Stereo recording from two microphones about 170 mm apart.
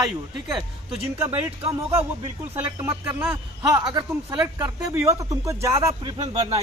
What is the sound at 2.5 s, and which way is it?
Speech, 15° right (ahead or behind).